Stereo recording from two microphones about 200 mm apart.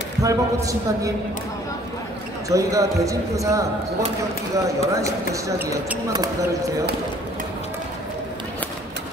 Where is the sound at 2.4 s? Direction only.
15° right (ahead or behind).